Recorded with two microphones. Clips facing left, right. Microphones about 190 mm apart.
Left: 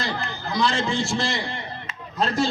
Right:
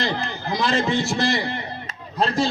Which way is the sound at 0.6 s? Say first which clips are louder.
Right 2 dB; 20° right (ahead or behind).